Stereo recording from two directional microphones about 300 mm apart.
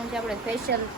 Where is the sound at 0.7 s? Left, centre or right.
Right.